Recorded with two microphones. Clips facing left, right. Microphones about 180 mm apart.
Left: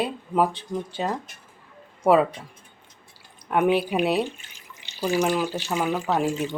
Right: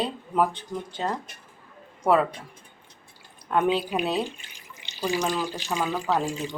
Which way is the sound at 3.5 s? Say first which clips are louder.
Left 3 dB; 15° left (ahead or behind).